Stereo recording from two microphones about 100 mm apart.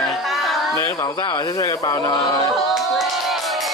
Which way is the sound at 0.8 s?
35° left (ahead or behind).